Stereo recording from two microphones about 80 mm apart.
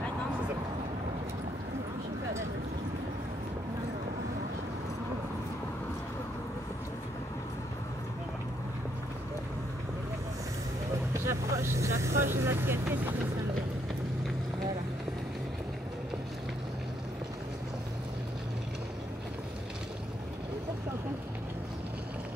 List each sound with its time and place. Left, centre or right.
11.2 s speech: right